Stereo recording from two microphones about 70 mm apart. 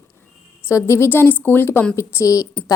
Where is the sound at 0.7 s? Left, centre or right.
Left.